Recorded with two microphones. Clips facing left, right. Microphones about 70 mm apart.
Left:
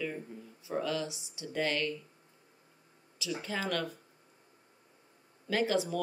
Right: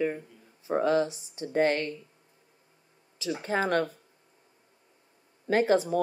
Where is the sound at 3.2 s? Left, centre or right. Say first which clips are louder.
Right 7 dB; right.